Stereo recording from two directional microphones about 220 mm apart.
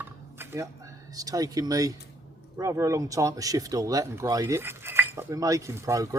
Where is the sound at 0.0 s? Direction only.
10° right (ahead or behind).